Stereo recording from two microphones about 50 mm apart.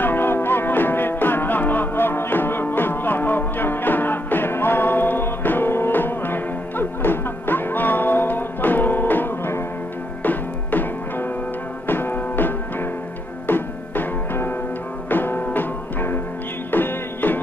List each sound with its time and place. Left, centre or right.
0.0 s music: left
16.7 s music: left